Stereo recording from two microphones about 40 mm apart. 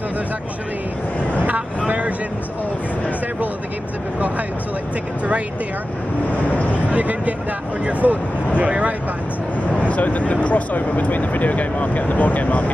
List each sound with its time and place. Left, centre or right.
1.9 s vehicle: right
6.3 s a sound: left
6.9 s a sound: right
8.0 s speech: right
8.5 s speech: right
9.8 s speech: left